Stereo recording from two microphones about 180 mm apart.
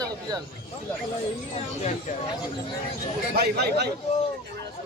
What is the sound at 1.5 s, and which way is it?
Speech, 35° left (ahead or behind).